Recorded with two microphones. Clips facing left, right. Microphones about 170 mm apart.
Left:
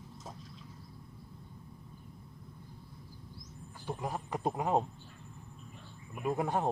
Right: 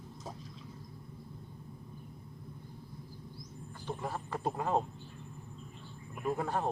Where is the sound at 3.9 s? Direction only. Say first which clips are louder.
Left 1 dB; 15° left (ahead or behind).